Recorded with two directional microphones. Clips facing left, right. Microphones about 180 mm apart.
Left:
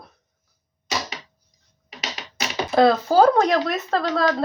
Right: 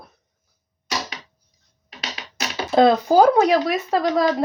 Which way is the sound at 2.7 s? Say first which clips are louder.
Right 2 dB; 20° right (ahead or behind).